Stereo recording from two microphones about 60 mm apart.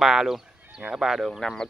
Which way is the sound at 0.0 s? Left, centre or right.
Centre.